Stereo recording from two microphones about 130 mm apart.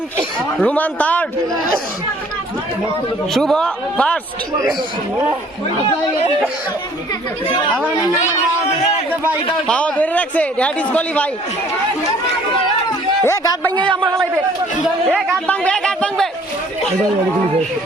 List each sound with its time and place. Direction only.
0.3 s a man's voice: 10° left (ahead or behind)
3.3 s a man's voice: 5° left (ahead or behind)
9.6 s a man's voice: 10° left (ahead or behind)
13.2 s speech: 25° left (ahead or behind)
13.7 s speech: 40° right (ahead or behind)
15.0 s a man's voice: centre (ahead or behind)
15.4 s a sound: 5° left (ahead or behind)